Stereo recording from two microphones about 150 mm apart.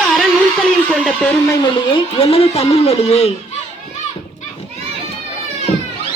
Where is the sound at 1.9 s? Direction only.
40° left (ahead or behind).